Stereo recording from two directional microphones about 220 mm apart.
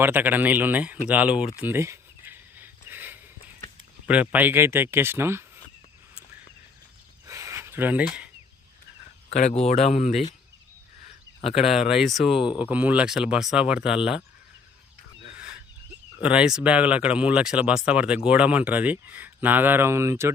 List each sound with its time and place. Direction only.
0.0 s speech: 10° right (ahead or behind)
1.5 s a sound: 10° right (ahead or behind)
4.0 s speech: 5° right (ahead or behind)
7.3 s a sound: 15° right (ahead or behind)
9.3 s speech: 30° left (ahead or behind)
11.3 s speech: 25° left (ahead or behind)
11.9 s speech: centre (ahead or behind)
16.2 s speech: 5° right (ahead or behind)